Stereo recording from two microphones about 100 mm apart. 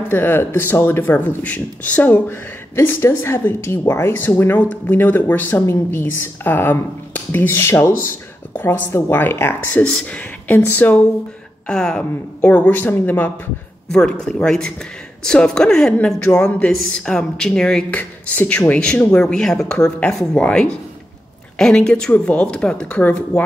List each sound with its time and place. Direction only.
0.1 s speech: 20° left (ahead or behind)
9.8 s speech: 10° left (ahead or behind)
11.6 s a woman's voice: 5° left (ahead or behind)
14.2 s a woman's voice: 5° left (ahead or behind)
17.9 s a woman's voice: 15° left (ahead or behind)